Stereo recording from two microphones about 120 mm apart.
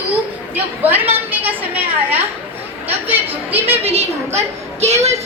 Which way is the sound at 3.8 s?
55° right (ahead or behind).